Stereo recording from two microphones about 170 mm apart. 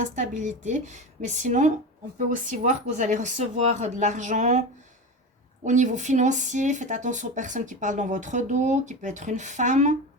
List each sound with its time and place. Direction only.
0.0 s speech: 45° right (ahead or behind)
5.6 s speech: 45° right (ahead or behind)